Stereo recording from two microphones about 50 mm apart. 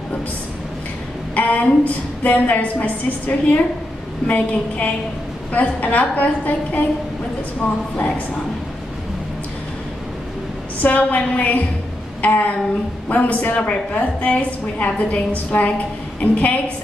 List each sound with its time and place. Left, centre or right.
1.3 s a sound: left
2.2 s a woman's voice: left
10.8 s a woman's voice: left